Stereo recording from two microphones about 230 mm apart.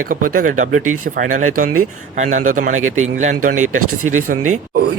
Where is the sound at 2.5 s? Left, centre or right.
Right.